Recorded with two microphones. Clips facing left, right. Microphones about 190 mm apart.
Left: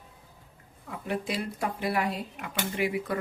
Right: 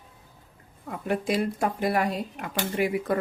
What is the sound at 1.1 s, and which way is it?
Speech, 50° right (ahead or behind).